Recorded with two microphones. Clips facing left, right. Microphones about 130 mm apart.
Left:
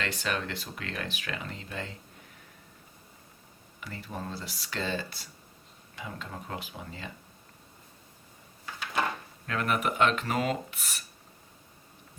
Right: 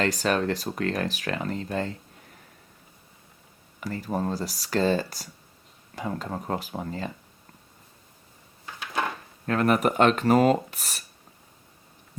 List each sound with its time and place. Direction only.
0.0 s speech: 40° right (ahead or behind)
3.8 s speech: 40° right (ahead or behind)
9.5 s speech: 40° right (ahead or behind)